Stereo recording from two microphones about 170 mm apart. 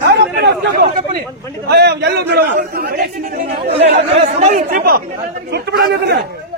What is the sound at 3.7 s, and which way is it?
Speech, 40° right (ahead or behind).